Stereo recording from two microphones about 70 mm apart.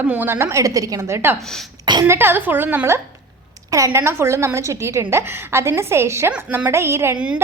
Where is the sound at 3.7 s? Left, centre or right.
Right.